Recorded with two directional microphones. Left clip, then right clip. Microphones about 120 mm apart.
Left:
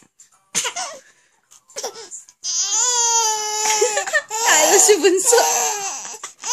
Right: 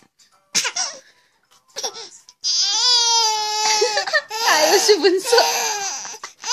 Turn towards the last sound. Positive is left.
turn(degrees=15)  # may be behind; listen again after turning